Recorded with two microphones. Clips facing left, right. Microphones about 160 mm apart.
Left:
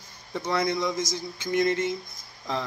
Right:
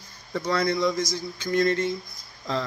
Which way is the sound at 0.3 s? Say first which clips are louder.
Right 2 dB; 20° left (ahead or behind).